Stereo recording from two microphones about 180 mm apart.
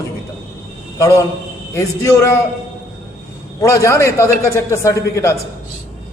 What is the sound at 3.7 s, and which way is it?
Speech, 15° left (ahead or behind).